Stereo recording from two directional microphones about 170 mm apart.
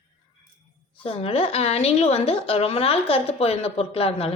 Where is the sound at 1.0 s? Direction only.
35° left (ahead or behind).